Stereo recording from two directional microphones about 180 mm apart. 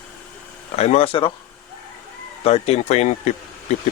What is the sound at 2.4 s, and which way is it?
Speech, 35° left (ahead or behind).